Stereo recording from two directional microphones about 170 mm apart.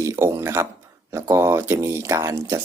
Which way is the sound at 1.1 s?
15° right (ahead or behind).